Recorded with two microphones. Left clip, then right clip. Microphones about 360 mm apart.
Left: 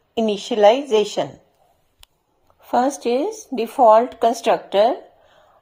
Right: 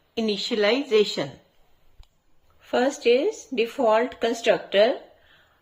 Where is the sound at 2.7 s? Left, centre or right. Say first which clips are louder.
Left 2 dB; centre.